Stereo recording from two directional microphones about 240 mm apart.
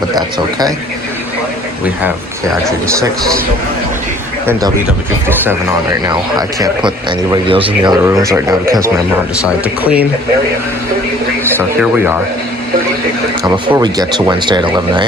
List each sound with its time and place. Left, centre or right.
0.2 s a man's voice: centre
1.8 s a man's voice: centre
4.4 s a man's voice: centre
9.8 s a man's voice: centre
13.5 s a man's voice: centre